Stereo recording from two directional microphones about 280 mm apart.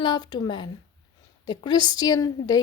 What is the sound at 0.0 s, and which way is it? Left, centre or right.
A woman's voice, centre.